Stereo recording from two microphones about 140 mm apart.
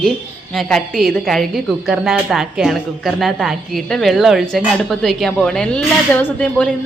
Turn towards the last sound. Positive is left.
turn(degrees=5)  # may be behind; listen again after turning